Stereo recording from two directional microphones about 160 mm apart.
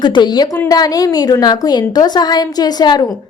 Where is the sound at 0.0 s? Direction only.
25° left (ahead or behind).